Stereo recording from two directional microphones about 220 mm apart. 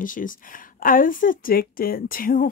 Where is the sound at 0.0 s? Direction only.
40° left (ahead or behind).